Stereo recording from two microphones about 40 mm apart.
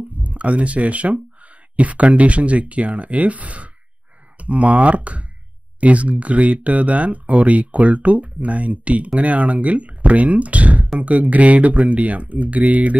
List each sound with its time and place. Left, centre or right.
0.2 s speech: right